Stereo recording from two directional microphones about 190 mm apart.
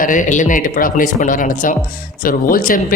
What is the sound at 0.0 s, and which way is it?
Speech, 45° left (ahead or behind).